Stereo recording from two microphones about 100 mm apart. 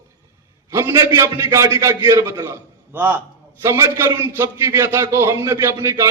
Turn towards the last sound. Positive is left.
turn(degrees=-30)  # may be behind; listen again after turning